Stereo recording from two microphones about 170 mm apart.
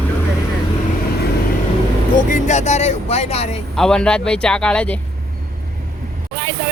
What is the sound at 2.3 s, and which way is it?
Speech, 45° left (ahead or behind).